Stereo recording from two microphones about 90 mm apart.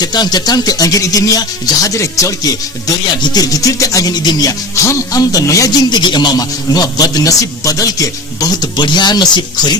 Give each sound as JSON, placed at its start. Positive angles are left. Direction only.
{"t": 0.0, "sound": "speech", "side_deg": 50}
{"t": 4.7, "sound": "speech", "side_deg": 35}
{"t": 5.9, "sound": "speech", "side_deg": 55}
{"t": 8.7, "sound": "speech", "side_deg": 55}